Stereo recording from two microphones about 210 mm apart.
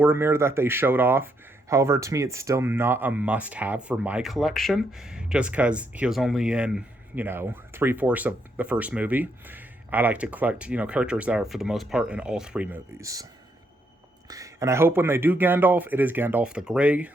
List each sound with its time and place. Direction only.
0.0 s speech: 10° right (ahead or behind)
14.3 s speech: 15° right (ahead or behind)